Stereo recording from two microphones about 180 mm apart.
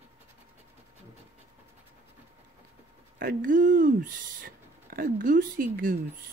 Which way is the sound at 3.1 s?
50° right (ahead or behind).